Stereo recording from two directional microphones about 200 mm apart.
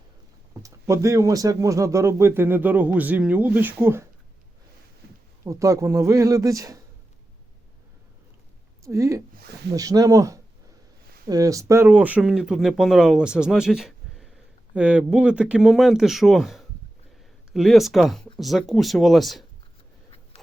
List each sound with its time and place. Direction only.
0.6 s speech: 15° right (ahead or behind)
5.5 s speech: 15° right (ahead or behind)
8.9 s speech: 15° right (ahead or behind)
9.3 s speech: 50° right (ahead or behind)
9.7 s speech: 20° right (ahead or behind); by 19.5 s centre (ahead or behind)